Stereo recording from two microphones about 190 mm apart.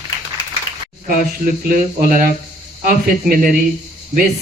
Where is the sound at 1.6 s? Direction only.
50° right (ahead or behind).